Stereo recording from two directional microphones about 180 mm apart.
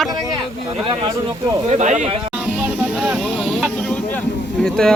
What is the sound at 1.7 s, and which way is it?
Speech, 40° right (ahead or behind).